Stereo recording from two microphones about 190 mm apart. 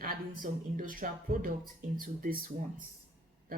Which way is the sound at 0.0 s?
45° right (ahead or behind).